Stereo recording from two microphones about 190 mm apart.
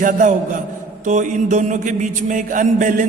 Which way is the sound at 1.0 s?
40° right (ahead or behind).